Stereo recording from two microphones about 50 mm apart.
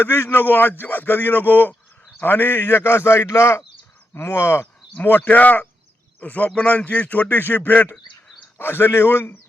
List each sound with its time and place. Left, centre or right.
0.0 s a man's voice: left
5.0 s speech: left
8.5 s a man's voice: left